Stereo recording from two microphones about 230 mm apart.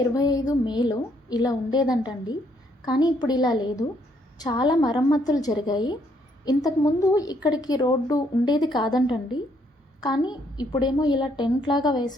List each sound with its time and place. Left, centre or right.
0.1 s a woman's voice: centre